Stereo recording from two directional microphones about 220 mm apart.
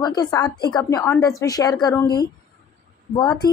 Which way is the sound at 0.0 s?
20° left (ahead or behind).